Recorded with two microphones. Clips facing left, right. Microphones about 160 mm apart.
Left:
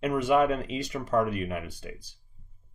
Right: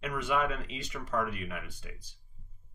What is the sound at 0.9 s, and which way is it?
Speech, 40° left (ahead or behind).